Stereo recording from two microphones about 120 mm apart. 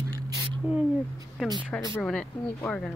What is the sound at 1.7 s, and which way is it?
Speech, 15° left (ahead or behind).